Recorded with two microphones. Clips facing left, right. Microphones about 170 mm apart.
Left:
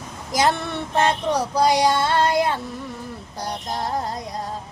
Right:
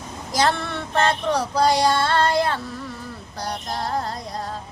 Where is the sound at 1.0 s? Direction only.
15° left (ahead or behind).